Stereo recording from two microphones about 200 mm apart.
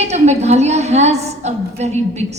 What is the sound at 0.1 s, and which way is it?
A woman's voice, 35° right (ahead or behind).